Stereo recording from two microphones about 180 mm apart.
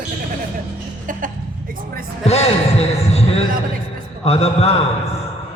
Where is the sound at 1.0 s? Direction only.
50° right (ahead or behind).